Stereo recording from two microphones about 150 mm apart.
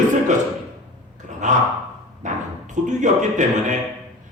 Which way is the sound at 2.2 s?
55° right (ahead or behind).